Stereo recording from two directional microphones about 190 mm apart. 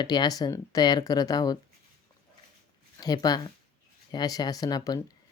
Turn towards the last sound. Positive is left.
turn(degrees=20)  # may be behind; listen again after turning